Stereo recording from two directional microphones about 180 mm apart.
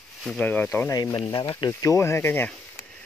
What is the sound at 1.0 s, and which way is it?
Speech, 20° left (ahead or behind).